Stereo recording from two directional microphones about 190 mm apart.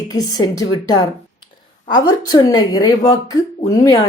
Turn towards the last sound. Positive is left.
turn(degrees=20)  # may be behind; listen again after turning